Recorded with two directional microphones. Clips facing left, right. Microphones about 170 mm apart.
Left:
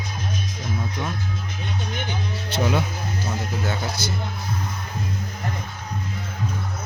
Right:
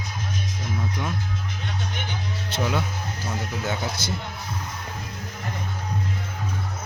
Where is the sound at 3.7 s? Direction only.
25° right (ahead or behind).